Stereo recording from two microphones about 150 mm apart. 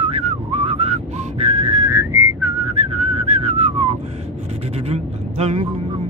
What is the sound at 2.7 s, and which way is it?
Whistling, 45° right (ahead or behind).